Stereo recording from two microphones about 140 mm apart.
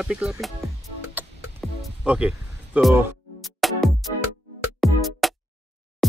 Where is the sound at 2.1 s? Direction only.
10° right (ahead or behind).